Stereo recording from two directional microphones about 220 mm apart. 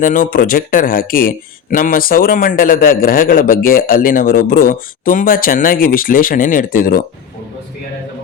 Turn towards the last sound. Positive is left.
turn(degrees=40)  # may be behind; listen again after turning